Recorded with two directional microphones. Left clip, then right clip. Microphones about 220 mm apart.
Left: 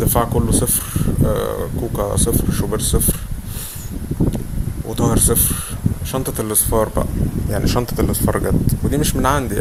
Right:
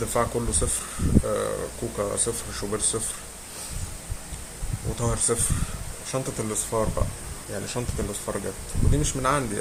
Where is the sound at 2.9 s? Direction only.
35° left (ahead or behind).